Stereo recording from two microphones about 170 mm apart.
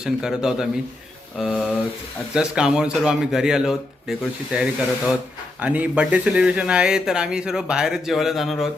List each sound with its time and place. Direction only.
0.0 s speech: 5° right (ahead or behind)